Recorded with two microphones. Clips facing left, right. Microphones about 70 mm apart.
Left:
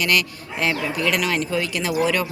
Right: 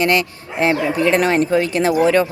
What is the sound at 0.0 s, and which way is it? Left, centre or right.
Speech, right.